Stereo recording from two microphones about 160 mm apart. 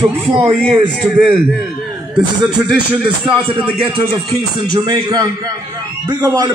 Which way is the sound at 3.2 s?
5° right (ahead or behind).